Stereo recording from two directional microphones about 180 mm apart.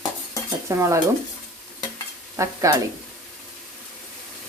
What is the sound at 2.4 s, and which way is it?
Stir, 20° right (ahead or behind).